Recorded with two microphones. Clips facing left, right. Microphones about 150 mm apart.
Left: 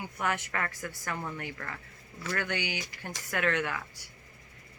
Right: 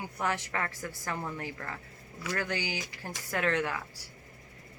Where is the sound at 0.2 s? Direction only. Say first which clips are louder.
Even; 30° right (ahead or behind).